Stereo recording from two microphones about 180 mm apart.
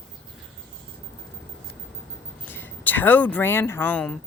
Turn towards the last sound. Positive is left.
turn(degrees=5)  # may be behind; listen again after turning